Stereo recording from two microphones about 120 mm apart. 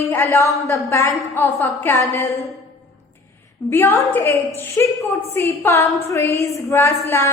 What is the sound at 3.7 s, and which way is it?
A woman's voice, 20° left (ahead or behind).